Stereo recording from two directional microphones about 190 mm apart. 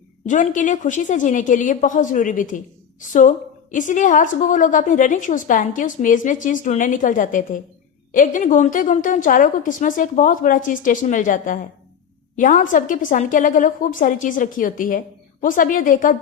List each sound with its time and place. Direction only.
0.3 s a woman's voice: 40° left (ahead or behind)